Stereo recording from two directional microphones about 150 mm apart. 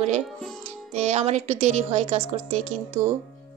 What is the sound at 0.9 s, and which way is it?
A woman's voice, 45° right (ahead or behind).